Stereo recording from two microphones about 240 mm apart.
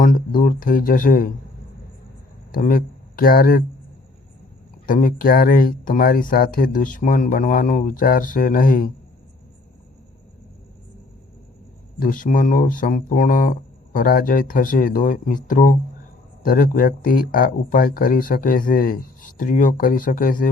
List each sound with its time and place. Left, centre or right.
0.0 s speech: left
2.5 s speech: left
4.9 s speech: left
11.9 s speech: left